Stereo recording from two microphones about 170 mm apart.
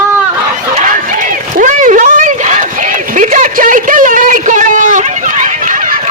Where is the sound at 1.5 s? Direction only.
50° right (ahead or behind).